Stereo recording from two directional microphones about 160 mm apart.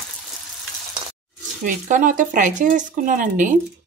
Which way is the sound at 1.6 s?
55° right (ahead or behind).